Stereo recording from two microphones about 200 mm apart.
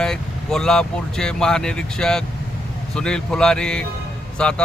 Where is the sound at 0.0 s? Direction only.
5° left (ahead or behind).